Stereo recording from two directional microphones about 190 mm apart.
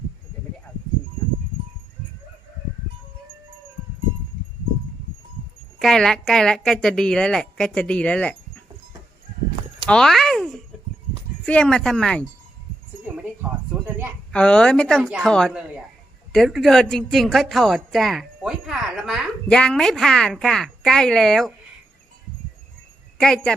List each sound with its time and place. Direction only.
5.8 s a woman's voice: centre (ahead or behind)
9.8 s a woman's voice: centre (ahead or behind)
13.1 s a sound: 10° right (ahead or behind)
14.3 s a woman's voice: 5° left (ahead or behind)
23.2 s a woman's voice: 5° left (ahead or behind)